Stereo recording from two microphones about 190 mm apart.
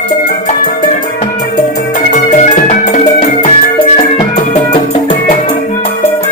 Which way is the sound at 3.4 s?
35° left (ahead or behind).